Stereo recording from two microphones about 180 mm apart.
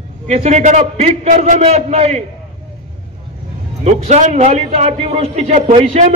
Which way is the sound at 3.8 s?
40° right (ahead or behind).